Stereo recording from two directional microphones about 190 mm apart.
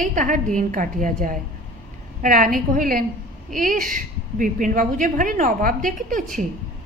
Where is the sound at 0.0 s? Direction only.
45° right (ahead or behind).